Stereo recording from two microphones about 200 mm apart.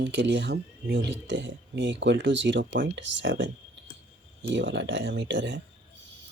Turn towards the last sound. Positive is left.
turn(degrees=-65)  # may be behind; listen again after turning